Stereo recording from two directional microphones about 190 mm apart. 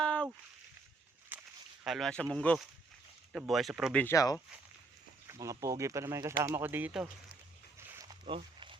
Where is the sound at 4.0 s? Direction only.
15° left (ahead or behind).